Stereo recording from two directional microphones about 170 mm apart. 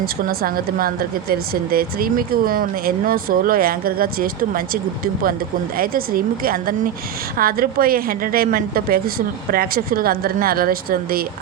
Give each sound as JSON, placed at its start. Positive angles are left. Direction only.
{"t": 0.0, "sound": "speech", "side_deg": -60}